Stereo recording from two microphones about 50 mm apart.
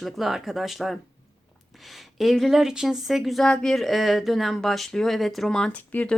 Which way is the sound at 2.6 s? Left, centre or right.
Centre.